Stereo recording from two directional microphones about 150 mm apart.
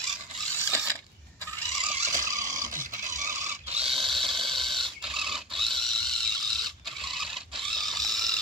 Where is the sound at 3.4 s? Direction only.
45° right (ahead or behind).